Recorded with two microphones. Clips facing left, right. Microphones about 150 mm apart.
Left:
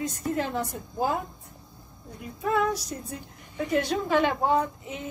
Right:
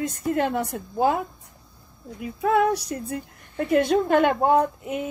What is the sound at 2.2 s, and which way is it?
Speech, 65° right (ahead or behind).